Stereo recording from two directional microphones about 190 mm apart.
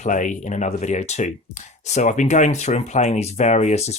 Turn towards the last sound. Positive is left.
turn(degrees=35)  # may be behind; listen again after turning